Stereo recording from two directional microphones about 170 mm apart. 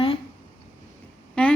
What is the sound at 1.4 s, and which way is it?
Speech, 5° left (ahead or behind).